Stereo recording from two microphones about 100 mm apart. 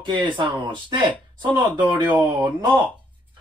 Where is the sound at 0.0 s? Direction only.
50° right (ahead or behind).